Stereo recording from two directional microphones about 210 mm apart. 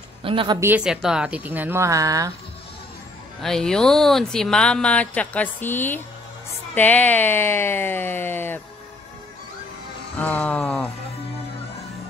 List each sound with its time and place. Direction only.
0.2 s speech: 25° right (ahead or behind)
0.6 s speech: 5° right (ahead or behind)
3.4 s speech: centre (ahead or behind)
10.1 s speech: 5° left (ahead or behind)